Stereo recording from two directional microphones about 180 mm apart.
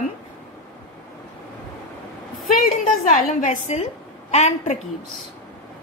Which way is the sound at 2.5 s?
45° left (ahead or behind).